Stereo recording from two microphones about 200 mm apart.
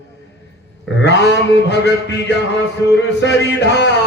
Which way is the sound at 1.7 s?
60° left (ahead or behind).